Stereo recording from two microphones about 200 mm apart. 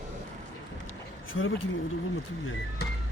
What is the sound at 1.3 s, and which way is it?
Speech, 80° left.